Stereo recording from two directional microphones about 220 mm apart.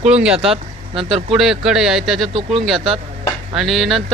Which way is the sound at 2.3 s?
25° right (ahead or behind).